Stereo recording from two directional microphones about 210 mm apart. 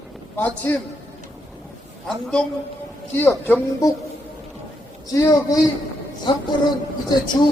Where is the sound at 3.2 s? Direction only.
10° left (ahead or behind).